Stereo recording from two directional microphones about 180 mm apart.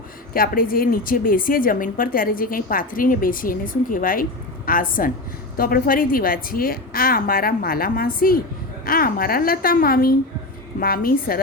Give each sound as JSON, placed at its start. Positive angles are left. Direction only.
{"t": 0.3, "sound": "a woman's voice", "side_deg": 55}